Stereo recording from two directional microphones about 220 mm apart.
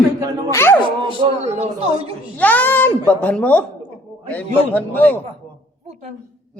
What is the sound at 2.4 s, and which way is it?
Speech, 5° left (ahead or behind).